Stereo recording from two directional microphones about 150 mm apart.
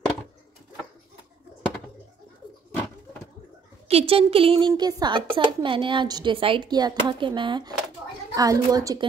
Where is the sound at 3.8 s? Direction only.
40° right (ahead or behind).